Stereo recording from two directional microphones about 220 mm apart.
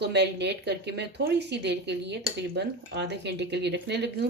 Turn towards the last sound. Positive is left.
turn(degrees=-50)  # may be behind; listen again after turning